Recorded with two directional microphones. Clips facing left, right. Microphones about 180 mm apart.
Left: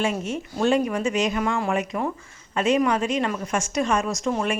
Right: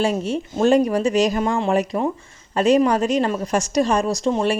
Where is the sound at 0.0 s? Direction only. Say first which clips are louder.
Right 4 dB; 35° right (ahead or behind).